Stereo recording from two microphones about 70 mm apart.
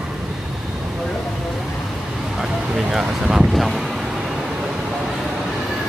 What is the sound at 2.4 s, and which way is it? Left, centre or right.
Boat, centre.